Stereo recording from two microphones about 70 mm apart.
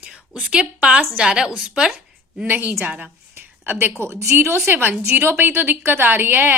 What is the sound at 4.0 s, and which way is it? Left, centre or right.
A woman's voice, right.